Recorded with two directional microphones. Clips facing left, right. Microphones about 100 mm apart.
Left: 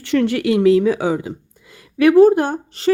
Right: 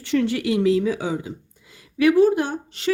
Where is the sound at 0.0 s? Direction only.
65° left (ahead or behind).